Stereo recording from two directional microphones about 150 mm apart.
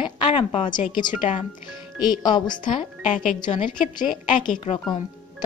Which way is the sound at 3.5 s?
65° left (ahead or behind).